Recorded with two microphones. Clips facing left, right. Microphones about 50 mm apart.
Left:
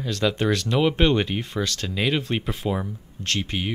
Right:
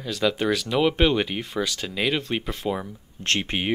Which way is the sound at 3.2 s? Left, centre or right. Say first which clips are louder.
Right 2 dB; right.